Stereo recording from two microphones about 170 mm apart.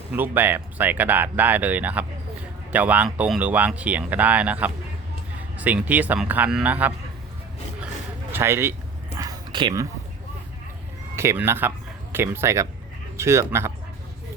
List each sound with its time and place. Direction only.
0.1 s speech: 10° right (ahead or behind)
8.3 s speech: 15° right (ahead or behind)
9.1 s whispering: 20° right (ahead or behind)
11.2 s speech: 15° right (ahead or behind)